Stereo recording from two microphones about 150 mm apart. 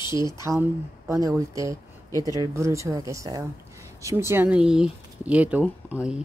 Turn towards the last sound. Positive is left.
turn(degrees=-5)  # may be behind; listen again after turning